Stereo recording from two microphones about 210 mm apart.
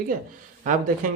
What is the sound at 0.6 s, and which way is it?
Speech, 40° right (ahead or behind).